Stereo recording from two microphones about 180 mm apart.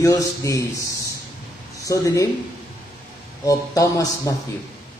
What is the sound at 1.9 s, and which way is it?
Speech, 20° left (ahead or behind).